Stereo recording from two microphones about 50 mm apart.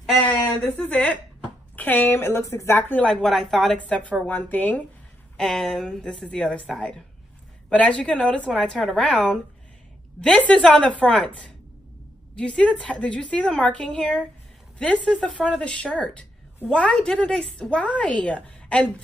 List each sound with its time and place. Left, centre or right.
0.2 s a woman's voice: left
2.2 s speech: left
3.0 s speech: centre
3.7 s a woman's voice: left
5.4 s speech: centre
5.9 s a woman's voice: centre
6.7 s speech: centre
7.7 s a woman's voice: left
10.4 s a woman's voice: left